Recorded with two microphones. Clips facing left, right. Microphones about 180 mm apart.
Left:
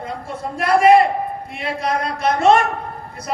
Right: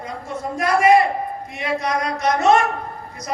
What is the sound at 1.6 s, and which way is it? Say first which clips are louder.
Speech: even; 30° left (ahead or behind).